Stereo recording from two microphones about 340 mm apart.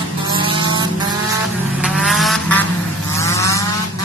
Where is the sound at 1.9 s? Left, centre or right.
Centre.